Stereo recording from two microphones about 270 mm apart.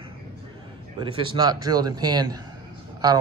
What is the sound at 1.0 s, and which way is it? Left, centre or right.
Speech, centre.